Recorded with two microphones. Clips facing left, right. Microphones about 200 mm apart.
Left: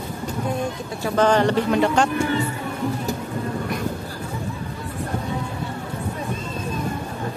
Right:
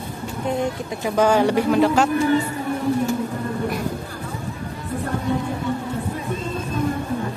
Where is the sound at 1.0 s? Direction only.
10° right (ahead or behind).